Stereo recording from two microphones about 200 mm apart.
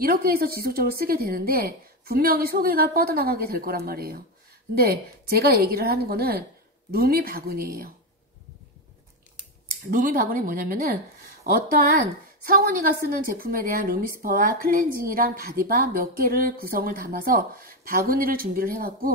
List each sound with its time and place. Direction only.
0.0 s a woman's voice: 50° right (ahead or behind)
9.8 s a woman's voice: 45° right (ahead or behind)
13.3 s a woman's voice: 45° right (ahead or behind)